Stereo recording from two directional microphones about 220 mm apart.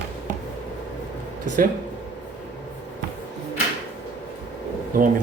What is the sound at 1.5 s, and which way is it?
Speech, 35° right (ahead or behind).